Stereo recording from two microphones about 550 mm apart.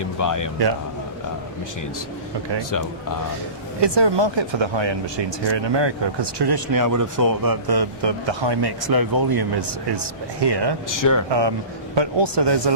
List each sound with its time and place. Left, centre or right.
0.0 s speech: left
3.8 s speech: right
10.8 s speech: left
11.3 s speech: right